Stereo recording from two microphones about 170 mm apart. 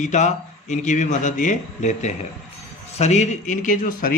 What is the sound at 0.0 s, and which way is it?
A man's voice, 45° left (ahead or behind).